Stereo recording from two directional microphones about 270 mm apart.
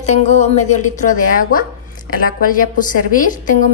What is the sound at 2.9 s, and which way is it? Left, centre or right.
Speech, left.